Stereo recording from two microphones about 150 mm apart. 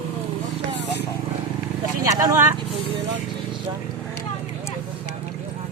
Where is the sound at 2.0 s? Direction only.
25° right (ahead or behind).